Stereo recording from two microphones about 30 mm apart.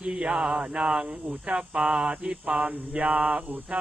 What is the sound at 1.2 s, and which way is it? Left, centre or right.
Cricket, right.